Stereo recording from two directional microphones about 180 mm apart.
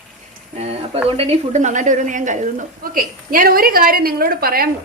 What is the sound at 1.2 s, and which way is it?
A woman's voice, 35° right (ahead or behind).